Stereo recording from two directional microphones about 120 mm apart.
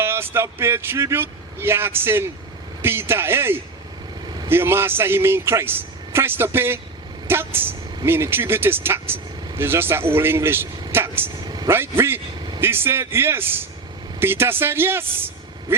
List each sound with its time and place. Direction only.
0.0 s a man's voice: 20° right (ahead or behind)
11.3 s vehicle: 35° right (ahead or behind)
11.7 s a man's voice: 20° right (ahead or behind)